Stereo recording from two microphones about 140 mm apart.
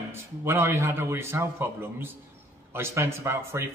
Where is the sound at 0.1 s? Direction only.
20° right (ahead or behind).